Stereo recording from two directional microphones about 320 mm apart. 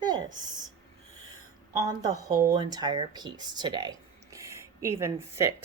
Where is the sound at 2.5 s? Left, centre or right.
Centre.